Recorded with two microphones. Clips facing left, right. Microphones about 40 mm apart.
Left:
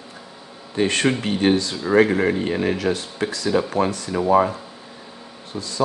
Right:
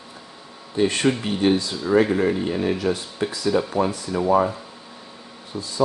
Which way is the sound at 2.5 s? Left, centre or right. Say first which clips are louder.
Left 1 dB; left.